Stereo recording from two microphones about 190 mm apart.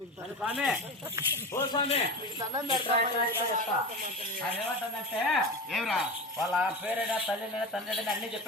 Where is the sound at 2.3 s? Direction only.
20° right (ahead or behind).